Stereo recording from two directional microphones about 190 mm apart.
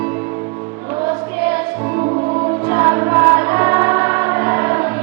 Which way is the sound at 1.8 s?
20° right (ahead or behind).